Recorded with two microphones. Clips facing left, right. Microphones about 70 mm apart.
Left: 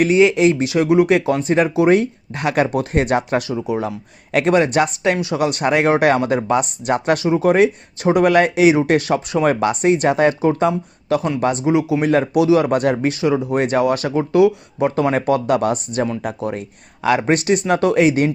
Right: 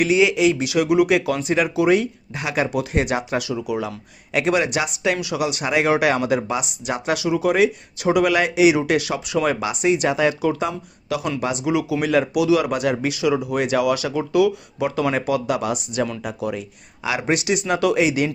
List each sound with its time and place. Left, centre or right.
0.0 s speech: left
11.7 s speech: left